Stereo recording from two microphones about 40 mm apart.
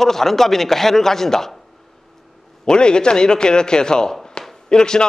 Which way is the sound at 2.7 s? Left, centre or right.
Left.